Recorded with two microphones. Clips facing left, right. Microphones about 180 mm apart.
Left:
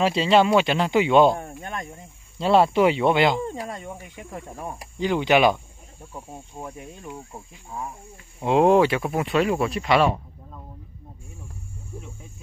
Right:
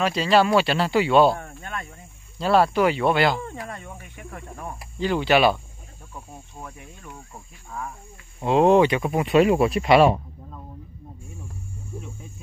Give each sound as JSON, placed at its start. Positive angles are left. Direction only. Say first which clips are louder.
{"t": 0.0, "sound": "speech", "louder": "left 1 dB", "side_deg": 25}
{"t": 8.4, "sound": "speech", "louder": "even", "side_deg": 10}
{"t": 9.3, "sound": "speech", "louder": "right 6 dB", "side_deg": -15}